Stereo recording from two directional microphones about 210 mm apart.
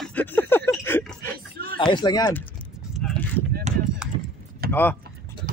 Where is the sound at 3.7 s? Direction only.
30° right (ahead or behind).